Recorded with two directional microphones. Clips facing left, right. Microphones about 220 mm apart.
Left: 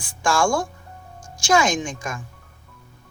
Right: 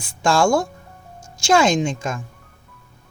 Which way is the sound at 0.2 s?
25° right (ahead or behind).